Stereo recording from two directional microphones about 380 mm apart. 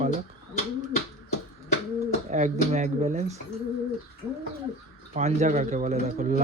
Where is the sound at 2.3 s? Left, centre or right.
Centre.